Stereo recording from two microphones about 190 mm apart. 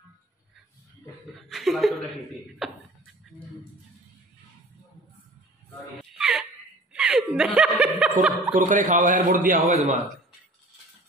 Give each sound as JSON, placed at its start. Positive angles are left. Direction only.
{"t": 1.5, "sound": "chuckle", "side_deg": 0}
{"t": 2.6, "sound": "a sound", "side_deg": 0}
{"t": 6.1, "sound": "wail", "side_deg": -5}
{"t": 6.9, "sound": "snicker", "side_deg": -5}
{"t": 8.5, "sound": "a man's voice", "side_deg": -40}